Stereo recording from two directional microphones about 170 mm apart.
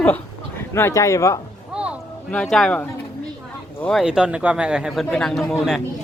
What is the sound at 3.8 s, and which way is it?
A man's voice, centre (ahead or behind).